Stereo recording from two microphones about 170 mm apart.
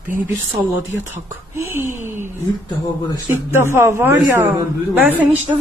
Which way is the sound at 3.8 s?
15° right (ahead or behind).